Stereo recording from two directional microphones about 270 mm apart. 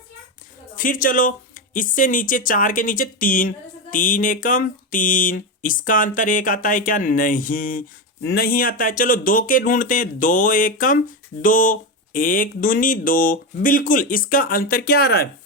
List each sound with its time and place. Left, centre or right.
0.8 s speech: left